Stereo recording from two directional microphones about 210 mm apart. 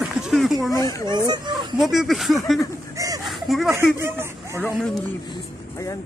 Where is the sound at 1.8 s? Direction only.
Centre (ahead or behind).